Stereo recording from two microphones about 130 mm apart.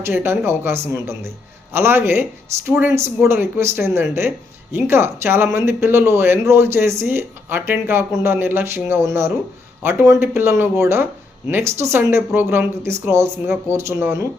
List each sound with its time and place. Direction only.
0.0 s speech: 15° right (ahead or behind)
3.2 s speech: 20° right (ahead or behind)